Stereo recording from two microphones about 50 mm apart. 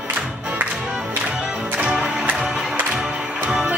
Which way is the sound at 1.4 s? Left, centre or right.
Right.